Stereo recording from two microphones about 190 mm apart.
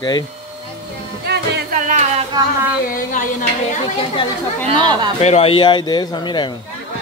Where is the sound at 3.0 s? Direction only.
45° left (ahead or behind).